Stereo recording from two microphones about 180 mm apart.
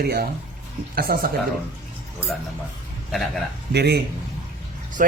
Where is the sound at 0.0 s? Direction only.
60° right (ahead or behind).